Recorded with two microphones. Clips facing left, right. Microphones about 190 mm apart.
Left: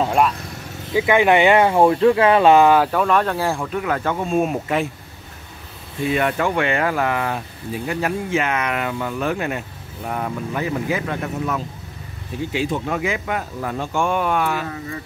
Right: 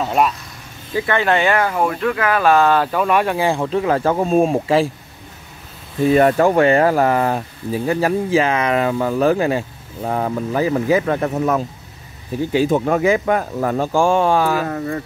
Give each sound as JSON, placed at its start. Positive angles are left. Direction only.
{"t": 0.9, "sound": "speech", "side_deg": 15}
{"t": 2.9, "sound": "speech", "side_deg": -5}
{"t": 3.6, "sound": "speech", "side_deg": -30}
{"t": 6.0, "sound": "speech", "side_deg": -40}
{"t": 11.3, "sound": "speech", "side_deg": -45}
{"t": 13.9, "sound": "speech", "side_deg": -30}